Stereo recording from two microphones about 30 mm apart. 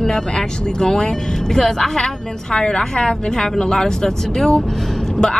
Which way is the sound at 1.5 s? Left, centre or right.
Centre.